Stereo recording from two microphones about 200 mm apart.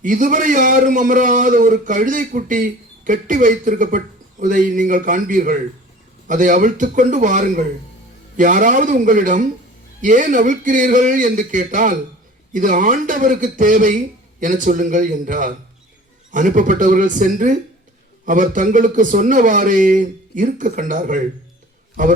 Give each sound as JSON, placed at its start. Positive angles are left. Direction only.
{"t": 0.0, "sound": "a man's voice", "side_deg": -40}